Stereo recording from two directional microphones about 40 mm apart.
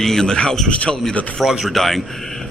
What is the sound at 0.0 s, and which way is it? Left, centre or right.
Speech, centre.